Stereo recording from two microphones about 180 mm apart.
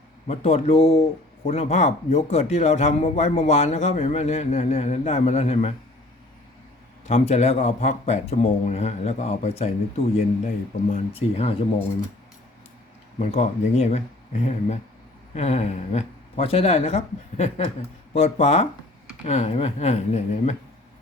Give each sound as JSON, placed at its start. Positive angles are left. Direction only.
{"t": 0.3, "sound": "speech", "side_deg": 35}
{"t": 7.1, "sound": "speech", "side_deg": 35}
{"t": 13.1, "sound": "speech", "side_deg": 35}